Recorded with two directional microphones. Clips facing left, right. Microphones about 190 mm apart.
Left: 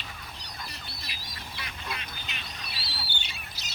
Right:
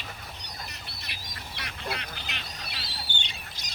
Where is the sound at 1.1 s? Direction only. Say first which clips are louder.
Right 1 dB; 60° right (ahead or behind).